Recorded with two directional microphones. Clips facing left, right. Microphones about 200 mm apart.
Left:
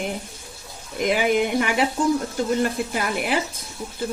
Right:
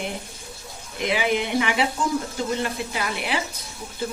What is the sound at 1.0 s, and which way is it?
Speech, 45° left (ahead or behind).